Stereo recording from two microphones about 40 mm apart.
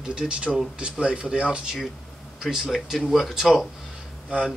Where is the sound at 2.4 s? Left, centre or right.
Centre.